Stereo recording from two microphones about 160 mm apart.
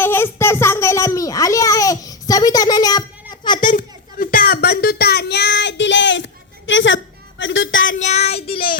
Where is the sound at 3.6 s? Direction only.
55° left (ahead or behind); by 5.8 s 90° left.